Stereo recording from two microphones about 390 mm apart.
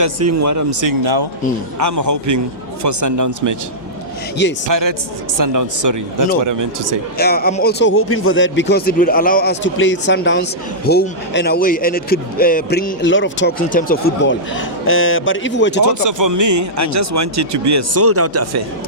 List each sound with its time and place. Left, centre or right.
0.0 s speech: right
1.0 s speech: right
1.8 s speech: right
4.7 s speech: right
7.2 s speech: left
15.9 s speech: right